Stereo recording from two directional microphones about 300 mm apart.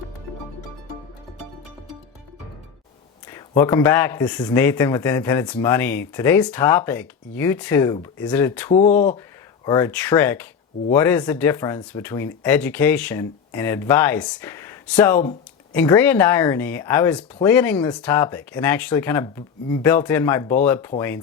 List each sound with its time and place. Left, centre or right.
3.2 s speech: centre
8.7 s speech: left
9.6 s speech: centre